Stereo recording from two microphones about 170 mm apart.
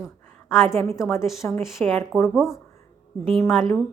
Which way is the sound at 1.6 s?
Centre (ahead or behind).